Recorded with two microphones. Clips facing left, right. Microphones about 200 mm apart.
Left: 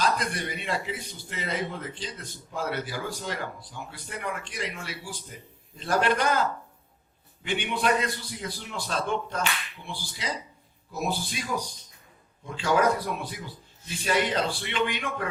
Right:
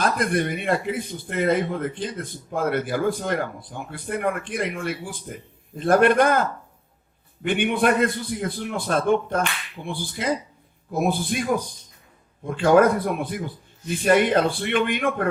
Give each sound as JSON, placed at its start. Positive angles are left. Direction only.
{"t": 0.0, "sound": "speech", "side_deg": -55}